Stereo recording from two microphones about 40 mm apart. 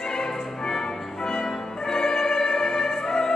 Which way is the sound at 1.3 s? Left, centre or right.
Centre.